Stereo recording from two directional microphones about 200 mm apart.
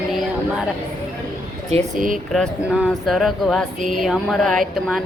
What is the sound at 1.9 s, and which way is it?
Speech, 45° right (ahead or behind).